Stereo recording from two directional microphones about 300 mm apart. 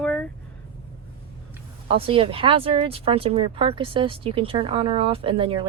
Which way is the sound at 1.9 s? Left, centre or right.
Centre.